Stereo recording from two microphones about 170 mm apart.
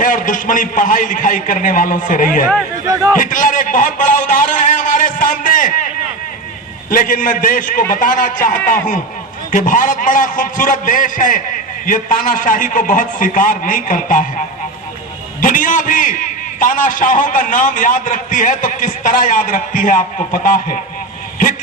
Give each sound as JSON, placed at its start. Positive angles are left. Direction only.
{"t": 0.0, "sound": "a man's voice", "side_deg": 50}
{"t": 2.8, "sound": "speech", "side_deg": -20}
{"t": 3.2, "sound": "a man's voice", "side_deg": 50}
{"t": 6.9, "sound": "a man's voice", "side_deg": 55}
{"t": 15.4, "sound": "a man's voice", "side_deg": 50}